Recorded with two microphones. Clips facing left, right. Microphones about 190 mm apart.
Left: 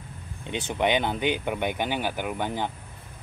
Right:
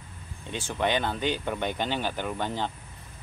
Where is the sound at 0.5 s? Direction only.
20° left (ahead or behind).